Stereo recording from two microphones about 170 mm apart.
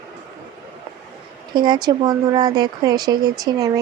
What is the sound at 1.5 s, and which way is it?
Speech, 25° right (ahead or behind).